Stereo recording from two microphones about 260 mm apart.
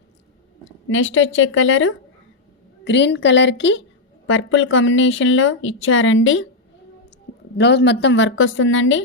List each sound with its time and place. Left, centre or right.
0.6 s speech: left
7.6 s speech: left